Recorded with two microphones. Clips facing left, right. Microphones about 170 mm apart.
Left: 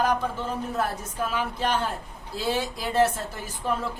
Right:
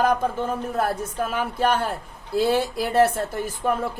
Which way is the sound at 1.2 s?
50° right (ahead or behind).